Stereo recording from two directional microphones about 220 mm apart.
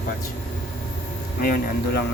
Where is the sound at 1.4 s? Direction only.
40° left (ahead or behind).